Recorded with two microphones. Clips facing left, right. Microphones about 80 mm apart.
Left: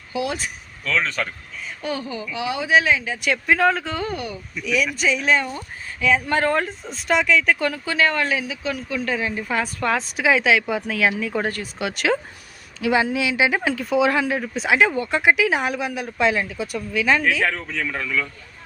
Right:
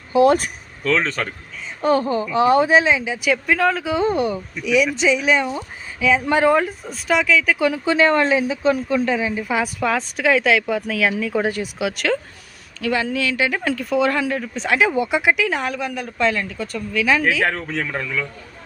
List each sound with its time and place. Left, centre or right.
0.1 s a woman's voice: right
2.8 s speech: centre
3.3 s speech: centre
3.9 s speech: right
4.6 s speech: centre
7.6 s speech: centre
9.0 s speech: centre
11.4 s speech: centre
11.8 s speech: centre
12.8 s speech: centre
14.8 s speech: centre
15.2 s a woman's voice: centre
17.5 s a man's voice: right
17.9 s speech: right